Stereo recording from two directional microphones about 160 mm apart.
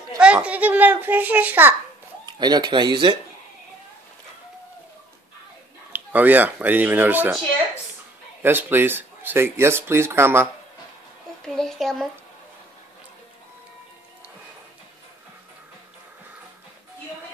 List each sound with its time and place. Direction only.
0.2 s a child's voice: 5° right (ahead or behind)
2.2 s speech: 25° right (ahead or behind)
5.9 s speech: 10° right (ahead or behind)
8.4 s speech: 15° right (ahead or behind)
11.4 s speech: 5° left (ahead or behind)